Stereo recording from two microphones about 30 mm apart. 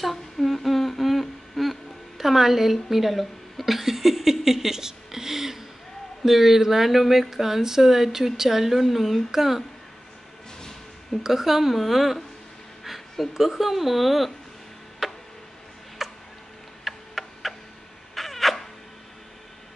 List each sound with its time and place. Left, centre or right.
0.0 s humming: centre
1.6 s a sound: centre
6.2 s speech: centre
11.2 s speech: centre
13.3 s speech: centre
15.0 s tick-tock: right
16.0 s tick-tock: centre
18.1 s a sound: centre